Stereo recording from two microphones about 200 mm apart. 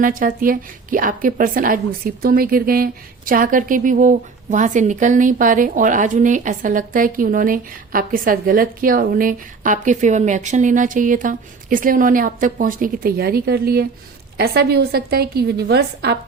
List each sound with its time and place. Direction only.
0.0 s a woman's voice: 45° right (ahead or behind)